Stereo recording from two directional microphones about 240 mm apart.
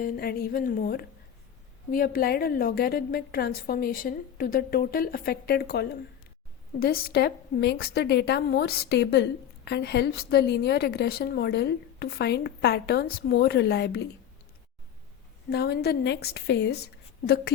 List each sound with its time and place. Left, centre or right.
0.0 s a woman's voice: left
15.4 s a woman's voice: left